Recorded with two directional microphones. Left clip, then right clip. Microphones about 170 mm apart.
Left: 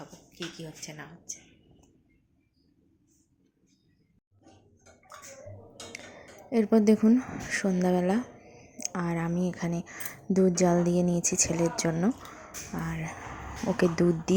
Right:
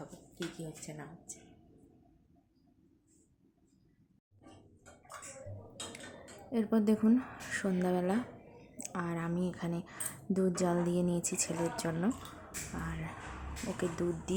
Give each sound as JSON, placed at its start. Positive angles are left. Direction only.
{"t": 0.6, "sound": "speech", "side_deg": 0}
{"t": 6.5, "sound": "speech", "side_deg": 25}
{"t": 8.5, "sound": "a sound", "side_deg": 10}
{"t": 8.8, "sound": "a woman's voice", "side_deg": 20}